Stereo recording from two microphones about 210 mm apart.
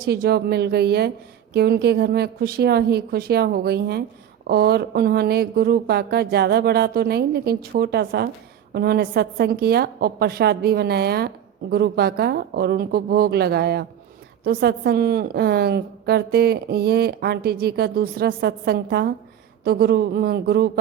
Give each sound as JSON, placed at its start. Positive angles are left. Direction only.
{"t": 0.0, "sound": "a woman's voice", "side_deg": -50}